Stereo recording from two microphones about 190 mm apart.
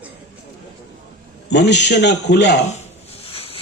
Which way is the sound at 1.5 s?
65° left (ahead or behind).